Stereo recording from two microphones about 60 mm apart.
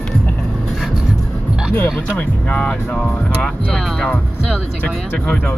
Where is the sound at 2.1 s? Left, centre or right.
Centre.